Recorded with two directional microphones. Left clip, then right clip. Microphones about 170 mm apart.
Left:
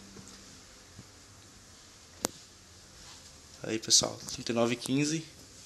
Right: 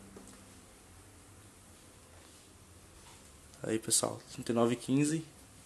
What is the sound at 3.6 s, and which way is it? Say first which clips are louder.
Speech: left 6 dB; 15° right (ahead or behind).